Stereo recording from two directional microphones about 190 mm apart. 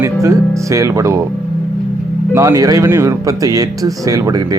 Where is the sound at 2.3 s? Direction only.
15° right (ahead or behind).